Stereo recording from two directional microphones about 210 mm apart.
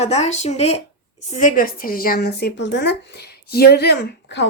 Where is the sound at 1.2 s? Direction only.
35° left (ahead or behind); by 4.5 s 55° left (ahead or behind).